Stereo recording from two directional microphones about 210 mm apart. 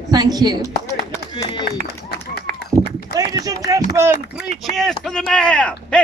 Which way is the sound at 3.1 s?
15° right (ahead or behind).